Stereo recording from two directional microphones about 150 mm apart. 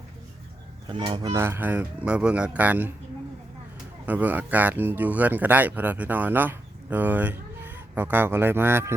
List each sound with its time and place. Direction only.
0.9 s speech: 35° right (ahead or behind)
1.3 s speech: 15° right (ahead or behind)
4.0 s speech: 10° right (ahead or behind)